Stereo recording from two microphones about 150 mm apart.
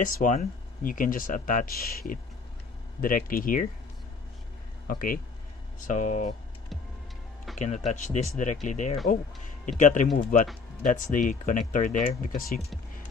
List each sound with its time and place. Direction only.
0.0 s speech: 60° left (ahead or behind); by 2.1 s 80° left
3.0 s speech: 70° left (ahead or behind)
4.8 s speech: 70° left (ahead or behind)
5.9 s speech: 55° left (ahead or behind)
7.5 s speech: 50° left (ahead or behind)
10.1 s speech: 65° left (ahead or behind)